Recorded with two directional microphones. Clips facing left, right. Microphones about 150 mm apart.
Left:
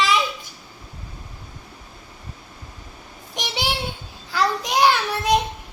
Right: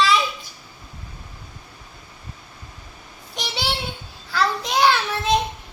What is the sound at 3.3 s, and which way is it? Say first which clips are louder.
Child singing: left 1 dB; 15° left (ahead or behind).